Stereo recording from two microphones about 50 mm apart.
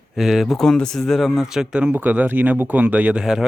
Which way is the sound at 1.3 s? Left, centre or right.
Centre.